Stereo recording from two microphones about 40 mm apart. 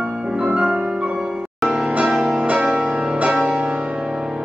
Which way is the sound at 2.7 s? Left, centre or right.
Right.